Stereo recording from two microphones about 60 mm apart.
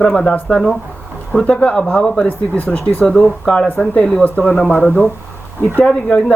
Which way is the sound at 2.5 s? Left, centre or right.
Left.